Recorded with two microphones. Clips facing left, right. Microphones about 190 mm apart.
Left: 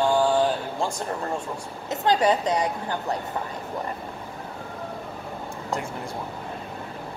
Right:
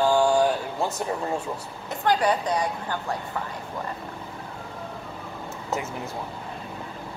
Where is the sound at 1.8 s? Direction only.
20° left (ahead or behind).